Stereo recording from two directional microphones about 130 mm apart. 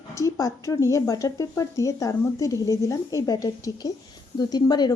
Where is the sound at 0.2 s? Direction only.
25° left (ahead or behind).